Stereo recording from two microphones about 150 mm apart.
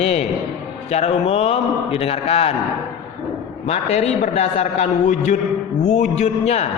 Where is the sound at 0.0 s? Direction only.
45° left (ahead or behind).